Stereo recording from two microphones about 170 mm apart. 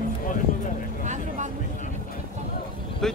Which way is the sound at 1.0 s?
45° right (ahead or behind).